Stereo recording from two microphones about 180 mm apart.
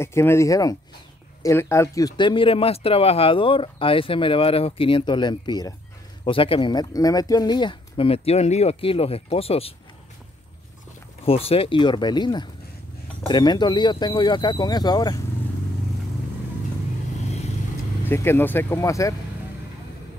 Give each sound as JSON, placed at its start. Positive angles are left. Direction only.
{"t": 0.0, "sound": "speech", "side_deg": 15}
{"t": 11.2, "sound": "speech", "side_deg": 30}
{"t": 18.0, "sound": "speech", "side_deg": 15}